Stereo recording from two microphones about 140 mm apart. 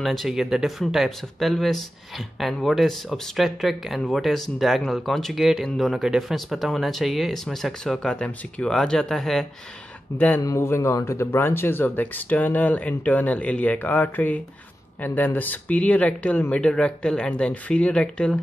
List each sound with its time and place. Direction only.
0.0 s speech: centre (ahead or behind)